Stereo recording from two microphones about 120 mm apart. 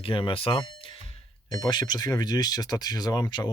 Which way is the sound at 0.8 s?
50° left (ahead or behind).